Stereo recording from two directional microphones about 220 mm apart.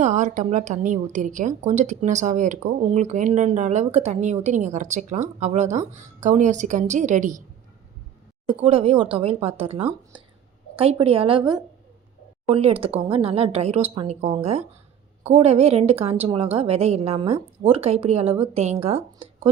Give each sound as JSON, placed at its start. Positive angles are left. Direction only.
{"t": 0.0, "sound": "a woman's voice", "side_deg": -35}
{"t": 8.4, "sound": "a woman's voice", "side_deg": -25}